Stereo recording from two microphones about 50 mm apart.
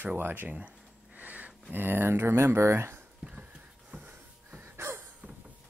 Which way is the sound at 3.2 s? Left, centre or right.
Right.